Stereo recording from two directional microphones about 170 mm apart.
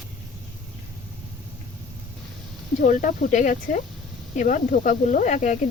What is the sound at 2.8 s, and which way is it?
Speech, 50° left (ahead or behind).